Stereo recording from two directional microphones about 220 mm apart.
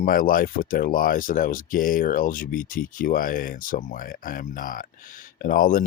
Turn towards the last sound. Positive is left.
turn(degrees=40)  # may be behind; listen again after turning